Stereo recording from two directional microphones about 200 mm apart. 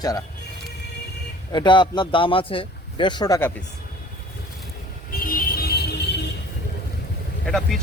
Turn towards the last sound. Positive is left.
turn(degrees=0)  # may be behind; listen again after turning